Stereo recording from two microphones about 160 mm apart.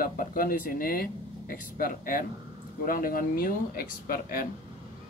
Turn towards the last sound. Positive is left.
turn(degrees=65)  # may be behind; listen again after turning